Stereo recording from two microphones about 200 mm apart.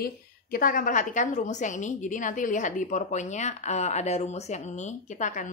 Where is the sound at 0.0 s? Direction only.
45° left (ahead or behind).